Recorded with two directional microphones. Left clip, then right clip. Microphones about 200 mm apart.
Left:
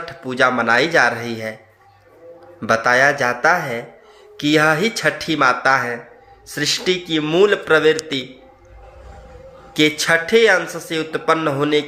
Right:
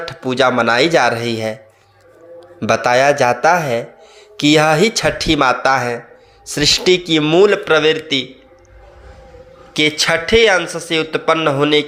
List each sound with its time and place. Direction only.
0.0 s speech: 35° right (ahead or behind)
2.6 s speech: 35° right (ahead or behind)
7.6 s a man's voice: 10° right (ahead or behind)
9.7 s a man's voice: 15° right (ahead or behind)